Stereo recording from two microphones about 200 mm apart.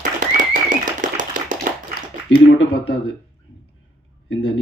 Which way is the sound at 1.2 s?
40° right (ahead or behind).